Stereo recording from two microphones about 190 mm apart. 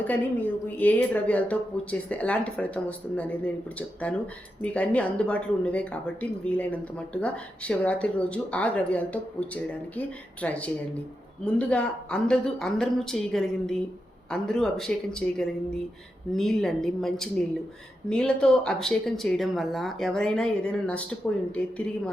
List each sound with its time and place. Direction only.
0.0 s speech: 10° left (ahead or behind)
10.4 s speech: 5° left (ahead or behind)